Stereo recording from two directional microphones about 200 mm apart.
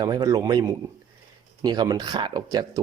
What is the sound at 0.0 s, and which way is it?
Speech, 20° right (ahead or behind).